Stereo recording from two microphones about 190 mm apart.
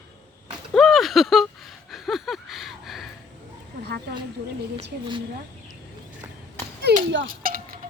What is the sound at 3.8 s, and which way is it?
Speech, 60° right (ahead or behind).